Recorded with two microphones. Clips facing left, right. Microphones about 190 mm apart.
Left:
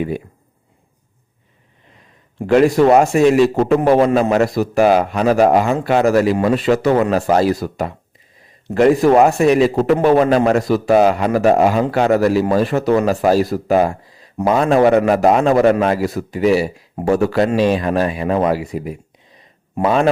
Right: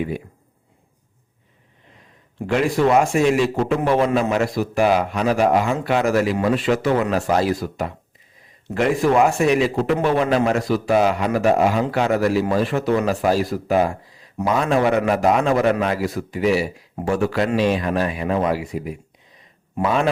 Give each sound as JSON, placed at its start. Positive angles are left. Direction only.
{"t": 2.5, "sound": "a man's voice", "side_deg": 40}